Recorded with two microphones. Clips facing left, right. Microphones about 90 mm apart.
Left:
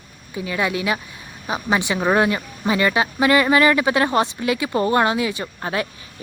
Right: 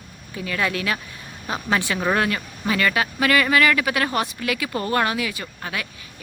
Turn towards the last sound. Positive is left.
turn(degrees=30)  # may be behind; listen again after turning